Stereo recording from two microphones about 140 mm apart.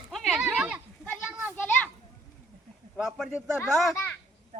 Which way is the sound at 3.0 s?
Centre (ahead or behind).